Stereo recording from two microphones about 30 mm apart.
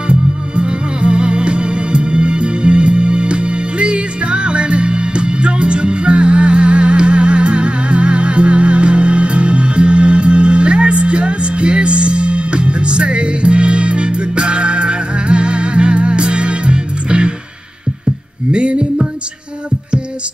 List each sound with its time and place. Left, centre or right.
0.0 s music: right
18.5 s music: right